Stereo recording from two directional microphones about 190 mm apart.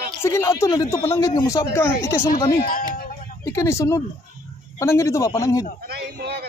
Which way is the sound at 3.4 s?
15° left (ahead or behind).